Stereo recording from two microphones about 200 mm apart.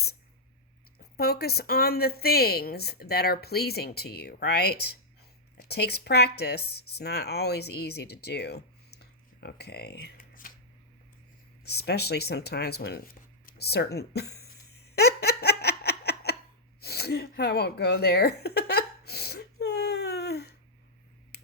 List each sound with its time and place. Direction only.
0.9 s speech: 50° left (ahead or behind)
11.6 s speech: 55° left (ahead or behind)
14.9 s giggle: 55° left (ahead or behind)
16.8 s a sound: 55° left (ahead or behind)